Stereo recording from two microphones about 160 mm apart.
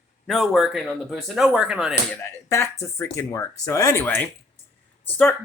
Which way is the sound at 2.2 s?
15° left (ahead or behind).